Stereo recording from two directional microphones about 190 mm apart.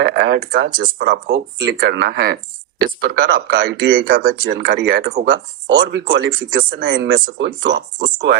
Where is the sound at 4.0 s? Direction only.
50° right (ahead or behind).